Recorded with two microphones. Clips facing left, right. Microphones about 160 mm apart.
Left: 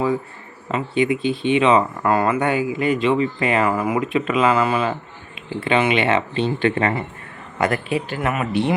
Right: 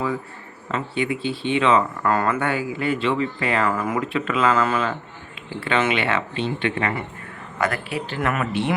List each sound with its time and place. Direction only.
0.7 s speech: 15° left (ahead or behind)
6.3 s speech: 35° left (ahead or behind)